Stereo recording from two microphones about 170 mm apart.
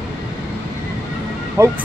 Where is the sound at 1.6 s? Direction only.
15° right (ahead or behind).